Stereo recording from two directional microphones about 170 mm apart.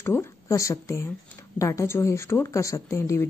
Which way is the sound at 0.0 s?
15° left (ahead or behind).